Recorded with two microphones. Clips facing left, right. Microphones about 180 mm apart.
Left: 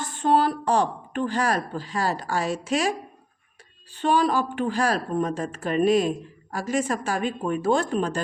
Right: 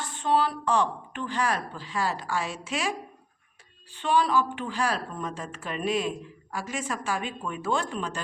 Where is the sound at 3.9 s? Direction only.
40° left (ahead or behind).